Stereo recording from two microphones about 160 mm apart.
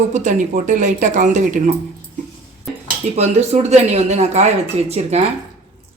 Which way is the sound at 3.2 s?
45° right (ahead or behind).